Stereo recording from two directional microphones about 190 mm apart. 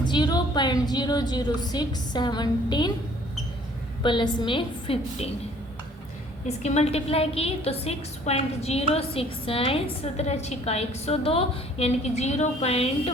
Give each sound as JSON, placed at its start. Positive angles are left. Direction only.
{"t": 0.0, "sound": "a woman's voice", "side_deg": 25}
{"t": 4.0, "sound": "a woman's voice", "side_deg": 25}
{"t": 6.6, "sound": "a woman's voice", "side_deg": 35}